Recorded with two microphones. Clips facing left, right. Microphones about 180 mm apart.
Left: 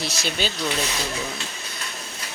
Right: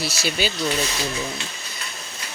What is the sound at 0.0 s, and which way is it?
Speech, 5° right (ahead or behind).